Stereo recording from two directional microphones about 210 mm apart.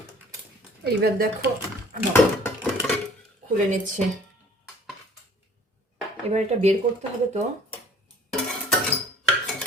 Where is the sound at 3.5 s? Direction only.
40° right (ahead or behind).